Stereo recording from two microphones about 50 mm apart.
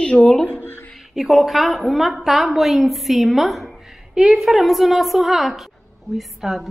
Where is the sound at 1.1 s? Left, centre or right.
Centre.